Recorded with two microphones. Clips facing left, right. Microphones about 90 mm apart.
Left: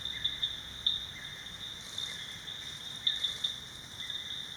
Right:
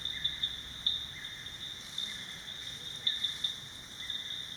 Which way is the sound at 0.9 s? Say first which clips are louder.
Left 1 dB; 25° right (ahead or behind).